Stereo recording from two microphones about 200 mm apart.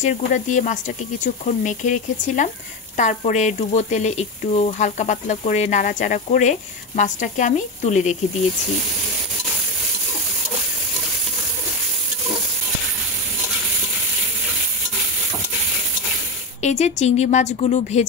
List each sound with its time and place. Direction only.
0.0 s speech: 40° left (ahead or behind)
16.6 s speech: 35° left (ahead or behind)